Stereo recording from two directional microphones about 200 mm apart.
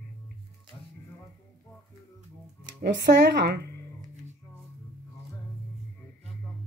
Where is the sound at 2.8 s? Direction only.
55° right (ahead or behind).